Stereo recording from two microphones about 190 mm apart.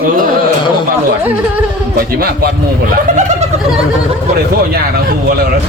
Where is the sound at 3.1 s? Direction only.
40° right (ahead or behind).